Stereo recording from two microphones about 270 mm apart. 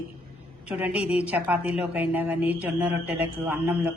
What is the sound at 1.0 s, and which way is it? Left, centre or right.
Speech, left.